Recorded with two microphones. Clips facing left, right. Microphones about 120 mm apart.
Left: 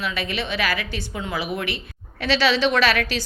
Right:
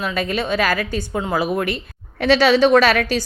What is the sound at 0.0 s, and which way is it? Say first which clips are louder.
A woman's voice: right 5 dB; 45° right (ahead or behind).